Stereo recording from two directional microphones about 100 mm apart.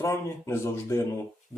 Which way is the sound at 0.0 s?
25° left (ahead or behind).